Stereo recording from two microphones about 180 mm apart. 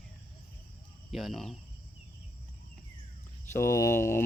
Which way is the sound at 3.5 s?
15° left (ahead or behind).